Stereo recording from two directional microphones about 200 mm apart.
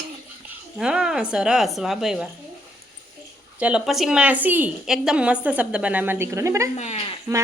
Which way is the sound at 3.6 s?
5° right (ahead or behind).